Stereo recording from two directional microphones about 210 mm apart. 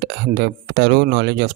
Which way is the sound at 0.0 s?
50° right (ahead or behind).